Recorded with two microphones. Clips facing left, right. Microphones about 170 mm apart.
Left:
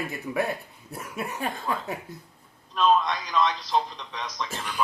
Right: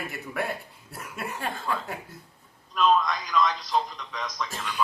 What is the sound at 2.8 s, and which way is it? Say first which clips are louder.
A man's voice: left 1 dB; 30° left (ahead or behind).